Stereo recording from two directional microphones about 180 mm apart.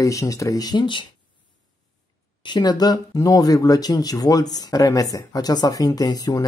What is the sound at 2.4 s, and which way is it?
Speech, 25° left (ahead or behind).